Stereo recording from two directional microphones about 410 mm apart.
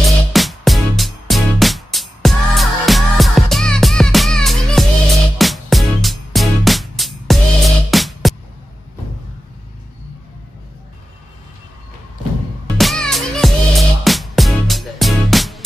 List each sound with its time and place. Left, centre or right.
0.0 s music: centre
12.7 s music: centre